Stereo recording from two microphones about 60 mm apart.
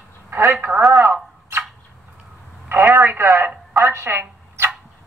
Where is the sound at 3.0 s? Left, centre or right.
Right.